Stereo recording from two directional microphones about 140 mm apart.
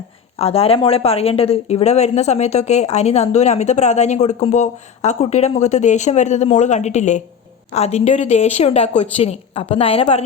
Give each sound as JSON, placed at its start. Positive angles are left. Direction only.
{"t": 0.3, "sound": "a woman's voice", "side_deg": 45}